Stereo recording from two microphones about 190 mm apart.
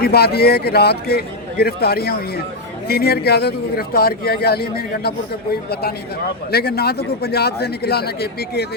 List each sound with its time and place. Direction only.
0.0 s a man's voice: 55° left (ahead or behind)
6.5 s a man's voice: 55° left (ahead or behind)